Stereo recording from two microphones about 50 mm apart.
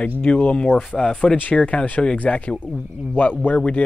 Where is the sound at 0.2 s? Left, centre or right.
Left.